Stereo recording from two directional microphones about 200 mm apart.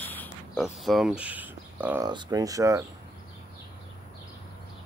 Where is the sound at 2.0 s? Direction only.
20° right (ahead or behind).